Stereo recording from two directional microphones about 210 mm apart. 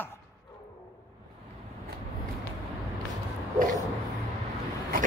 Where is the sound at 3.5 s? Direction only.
40° right (ahead or behind).